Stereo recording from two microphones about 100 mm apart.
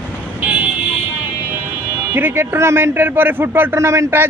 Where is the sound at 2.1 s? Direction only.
20° right (ahead or behind).